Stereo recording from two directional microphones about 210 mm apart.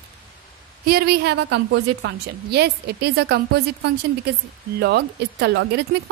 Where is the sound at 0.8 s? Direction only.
50° right (ahead or behind).